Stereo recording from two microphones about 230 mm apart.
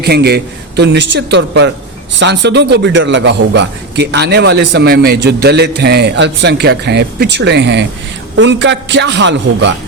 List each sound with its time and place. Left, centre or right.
0.0 s a man's voice: right